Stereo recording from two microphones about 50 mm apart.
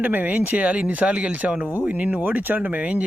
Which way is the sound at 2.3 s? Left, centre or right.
Right.